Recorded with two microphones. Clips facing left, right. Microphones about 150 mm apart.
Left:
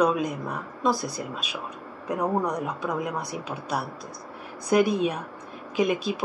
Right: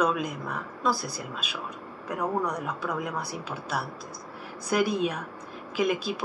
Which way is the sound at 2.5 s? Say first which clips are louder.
Left 3 dB; 15° left (ahead or behind).